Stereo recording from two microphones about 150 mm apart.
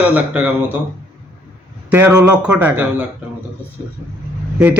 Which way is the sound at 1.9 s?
15° right (ahead or behind).